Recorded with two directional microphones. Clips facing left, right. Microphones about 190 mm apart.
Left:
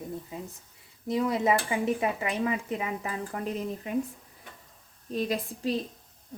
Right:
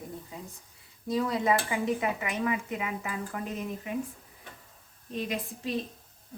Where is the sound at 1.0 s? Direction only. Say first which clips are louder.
Left 2 dB; 20° left (ahead or behind).